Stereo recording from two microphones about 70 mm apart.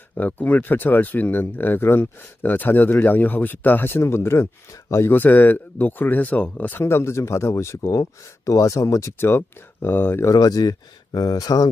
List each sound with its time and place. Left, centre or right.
0.2 s speech: left
5.0 s speech: left
7.8 s speech: left
10.3 s speech: left